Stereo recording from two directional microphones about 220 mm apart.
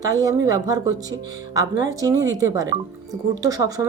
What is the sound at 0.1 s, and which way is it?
Speech, 15° right (ahead or behind).